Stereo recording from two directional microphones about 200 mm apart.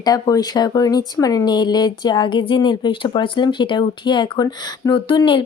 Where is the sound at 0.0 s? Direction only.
20° left (ahead or behind).